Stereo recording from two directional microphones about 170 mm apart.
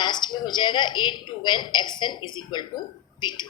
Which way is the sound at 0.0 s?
25° left (ahead or behind).